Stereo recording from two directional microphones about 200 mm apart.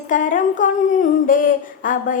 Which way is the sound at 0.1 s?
40° left (ahead or behind).